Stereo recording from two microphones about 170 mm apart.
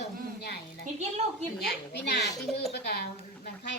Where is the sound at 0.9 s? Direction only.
40° right (ahead or behind).